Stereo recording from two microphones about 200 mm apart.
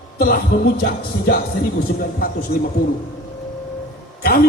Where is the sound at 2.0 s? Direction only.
45° left (ahead or behind).